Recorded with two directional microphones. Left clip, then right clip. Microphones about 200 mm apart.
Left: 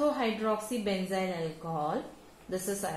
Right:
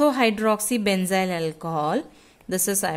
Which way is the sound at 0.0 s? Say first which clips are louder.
Right 9 dB; 45° right (ahead or behind).